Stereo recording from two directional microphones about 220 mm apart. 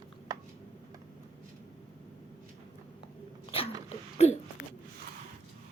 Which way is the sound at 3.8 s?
30° left (ahead or behind).